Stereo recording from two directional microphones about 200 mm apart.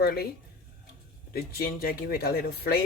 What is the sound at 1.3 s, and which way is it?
Speech, 50° left (ahead or behind).